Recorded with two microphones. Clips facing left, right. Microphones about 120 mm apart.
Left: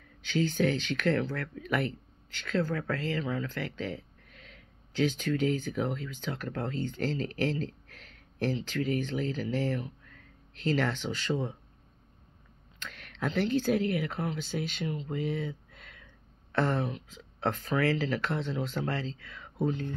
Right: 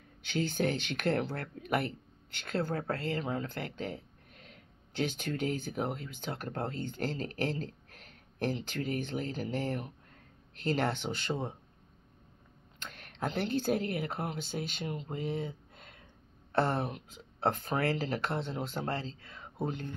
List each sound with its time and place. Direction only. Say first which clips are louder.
0.3 s speech: left 4 dB; 50° right (ahead or behind)
12.7 s speech: left 2 dB; 45° right (ahead or behind)